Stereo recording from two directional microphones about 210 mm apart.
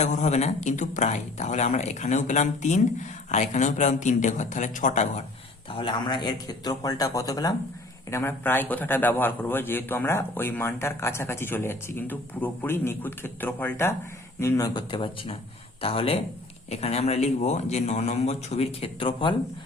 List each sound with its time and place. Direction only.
0.0 s speech: 35° left (ahead or behind)
5.7 s a man's voice: 20° left (ahead or behind)